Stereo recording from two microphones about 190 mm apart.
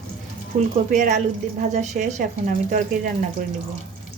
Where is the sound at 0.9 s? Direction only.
40° right (ahead or behind).